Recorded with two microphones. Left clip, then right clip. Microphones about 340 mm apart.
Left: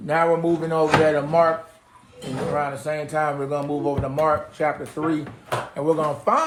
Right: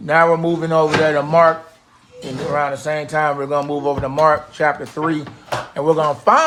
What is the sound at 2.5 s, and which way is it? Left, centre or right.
Speech, right.